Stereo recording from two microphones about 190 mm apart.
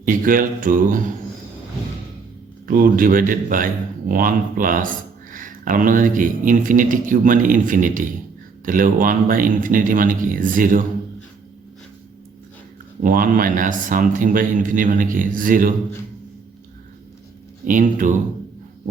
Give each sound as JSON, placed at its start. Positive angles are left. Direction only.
{"t": 0.0, "sound": "speech", "side_deg": -45}
{"t": 2.6, "sound": "speech", "side_deg": -50}
{"t": 13.0, "sound": "speech", "side_deg": -45}
{"t": 17.7, "sound": "speech", "side_deg": -45}